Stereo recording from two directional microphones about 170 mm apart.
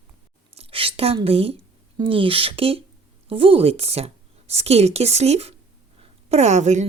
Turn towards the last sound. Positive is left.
turn(degrees=-40)  # may be behind; listen again after turning